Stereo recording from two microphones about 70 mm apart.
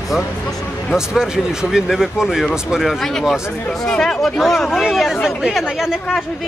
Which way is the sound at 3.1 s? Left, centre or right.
Centre.